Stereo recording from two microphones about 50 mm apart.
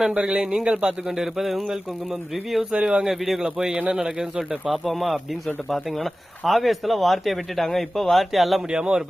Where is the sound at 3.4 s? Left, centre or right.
Centre.